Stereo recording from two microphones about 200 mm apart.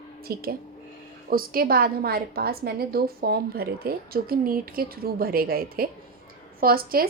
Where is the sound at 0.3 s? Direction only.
50° right (ahead or behind).